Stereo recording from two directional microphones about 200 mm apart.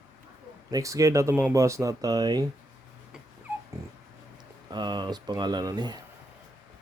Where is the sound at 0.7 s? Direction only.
15° right (ahead or behind).